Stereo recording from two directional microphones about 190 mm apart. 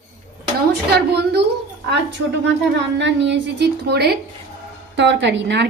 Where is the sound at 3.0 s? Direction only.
65° right (ahead or behind).